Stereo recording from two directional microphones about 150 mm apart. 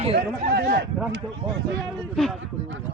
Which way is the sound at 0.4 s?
90° right.